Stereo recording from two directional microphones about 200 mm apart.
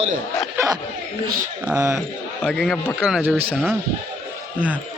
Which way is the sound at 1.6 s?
5° right (ahead or behind).